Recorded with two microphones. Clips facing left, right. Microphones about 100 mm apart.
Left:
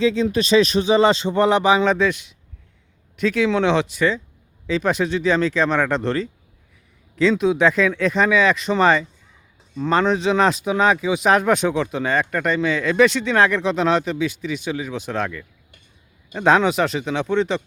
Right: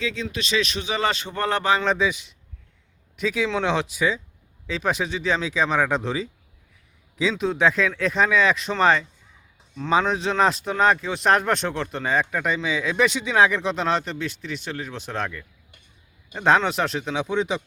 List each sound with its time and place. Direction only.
0.0 s speech: 35° left (ahead or behind); by 1.8 s 15° left (ahead or behind)
1.8 s speech: centre (ahead or behind)